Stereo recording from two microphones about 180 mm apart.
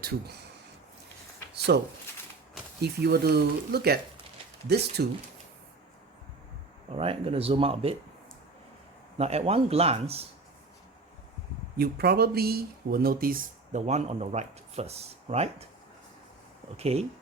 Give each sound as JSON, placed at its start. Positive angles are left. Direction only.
{"t": 0.0, "sound": "speech", "side_deg": -60}
{"t": 1.5, "sound": "speech", "side_deg": -65}
{"t": 2.8, "sound": "speech", "side_deg": -65}
{"t": 6.9, "sound": "speech", "side_deg": -30}
{"t": 9.1, "sound": "speech", "side_deg": -35}
{"t": 11.8, "sound": "speech", "side_deg": -60}
{"t": 13.8, "sound": "speech", "side_deg": -40}
{"t": 16.7, "sound": "speech", "side_deg": -35}